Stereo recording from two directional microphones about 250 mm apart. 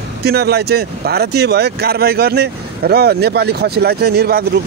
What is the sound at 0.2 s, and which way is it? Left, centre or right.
Speech, right.